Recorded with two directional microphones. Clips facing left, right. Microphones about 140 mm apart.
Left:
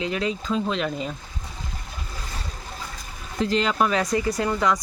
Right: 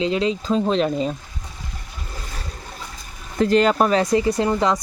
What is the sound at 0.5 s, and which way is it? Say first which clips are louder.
Speech: right 7 dB; 35° right (ahead or behind).